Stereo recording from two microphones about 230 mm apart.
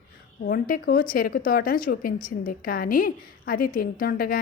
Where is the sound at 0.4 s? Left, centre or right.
Left.